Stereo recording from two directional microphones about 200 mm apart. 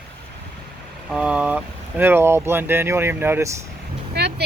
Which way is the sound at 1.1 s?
5° right (ahead or behind).